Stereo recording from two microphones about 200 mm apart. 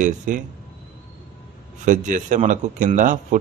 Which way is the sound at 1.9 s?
40° right (ahead or behind).